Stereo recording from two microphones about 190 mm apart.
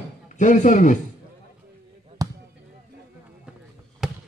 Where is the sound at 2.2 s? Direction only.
20° right (ahead or behind).